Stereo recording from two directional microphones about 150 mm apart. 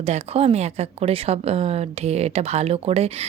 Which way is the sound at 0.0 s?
45° right (ahead or behind).